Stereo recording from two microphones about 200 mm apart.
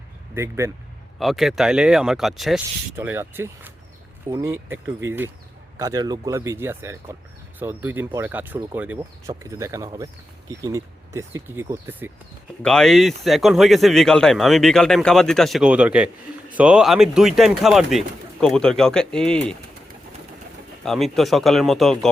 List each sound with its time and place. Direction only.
0.3 s speech: 15° right (ahead or behind)
1.2 s speech: centre (ahead or behind)
12.6 s speech: 5° left (ahead or behind)
20.8 s speech: centre (ahead or behind)